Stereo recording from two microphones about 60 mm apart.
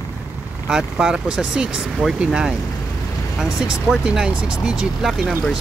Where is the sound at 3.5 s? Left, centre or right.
Centre.